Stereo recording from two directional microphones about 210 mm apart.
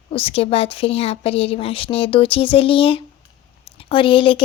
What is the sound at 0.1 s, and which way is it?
A woman's voice, 25° left (ahead or behind).